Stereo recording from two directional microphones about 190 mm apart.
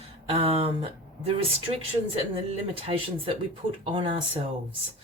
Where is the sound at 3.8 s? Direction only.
25° right (ahead or behind).